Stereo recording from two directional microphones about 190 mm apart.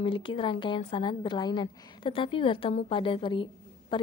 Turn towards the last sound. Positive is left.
turn(degrees=25)  # may be behind; listen again after turning